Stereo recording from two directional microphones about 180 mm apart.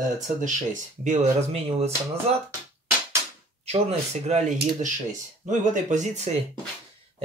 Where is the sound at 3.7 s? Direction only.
35° right (ahead or behind).